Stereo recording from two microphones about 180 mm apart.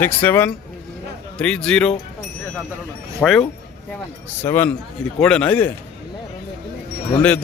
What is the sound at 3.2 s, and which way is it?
Speech, 5° left (ahead or behind).